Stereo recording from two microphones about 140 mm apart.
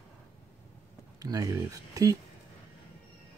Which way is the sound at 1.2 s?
25° right (ahead or behind).